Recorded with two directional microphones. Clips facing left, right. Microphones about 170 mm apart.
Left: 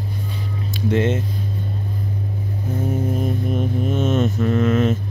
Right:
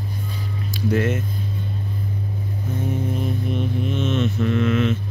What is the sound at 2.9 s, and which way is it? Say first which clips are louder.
Mantra: left 3 dB; 40° left (ahead or behind).